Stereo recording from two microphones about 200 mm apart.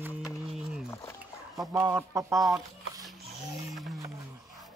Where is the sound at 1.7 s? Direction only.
15° right (ahead or behind).